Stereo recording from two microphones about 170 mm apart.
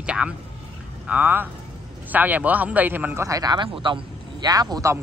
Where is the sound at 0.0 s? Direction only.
5° right (ahead or behind).